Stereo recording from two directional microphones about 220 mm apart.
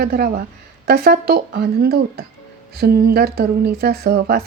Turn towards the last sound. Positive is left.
turn(degrees=-45)  # may be behind; listen again after turning